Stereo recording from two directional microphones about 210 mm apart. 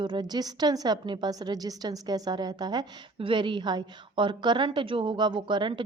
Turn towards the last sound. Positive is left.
turn(degrees=-20)  # may be behind; listen again after turning